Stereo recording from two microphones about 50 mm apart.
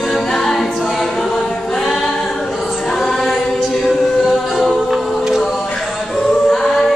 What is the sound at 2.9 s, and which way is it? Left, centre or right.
Choir, centre.